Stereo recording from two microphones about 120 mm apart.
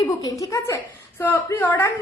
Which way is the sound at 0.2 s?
30° left (ahead or behind).